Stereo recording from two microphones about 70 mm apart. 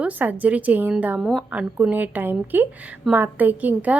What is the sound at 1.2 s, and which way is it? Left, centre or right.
Speech, centre.